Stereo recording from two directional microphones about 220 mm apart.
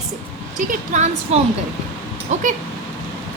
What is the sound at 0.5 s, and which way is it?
Speech, 35° right (ahead or behind).